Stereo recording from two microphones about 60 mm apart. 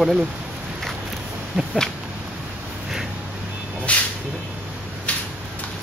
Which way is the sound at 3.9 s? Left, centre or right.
Left.